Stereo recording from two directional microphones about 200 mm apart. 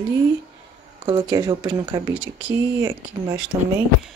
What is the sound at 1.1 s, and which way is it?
Speech, 20° right (ahead or behind).